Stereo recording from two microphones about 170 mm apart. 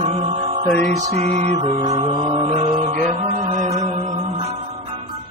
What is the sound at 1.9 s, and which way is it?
Mantra, 30° right (ahead or behind).